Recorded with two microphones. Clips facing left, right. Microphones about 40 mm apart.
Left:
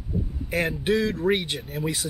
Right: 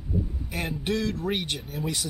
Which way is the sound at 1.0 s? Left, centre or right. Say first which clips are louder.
Left 5 dB; left.